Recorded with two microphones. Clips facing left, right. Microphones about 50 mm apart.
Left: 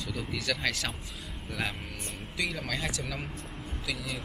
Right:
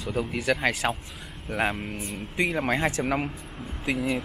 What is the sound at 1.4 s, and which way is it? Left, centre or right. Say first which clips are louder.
Speech: right 8 dB; right.